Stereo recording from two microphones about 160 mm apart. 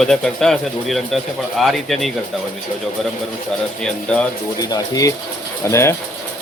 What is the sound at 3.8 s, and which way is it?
Speech, 5° left (ahead or behind).